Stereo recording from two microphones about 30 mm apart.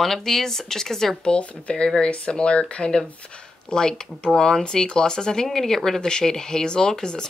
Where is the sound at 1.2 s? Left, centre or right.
Left.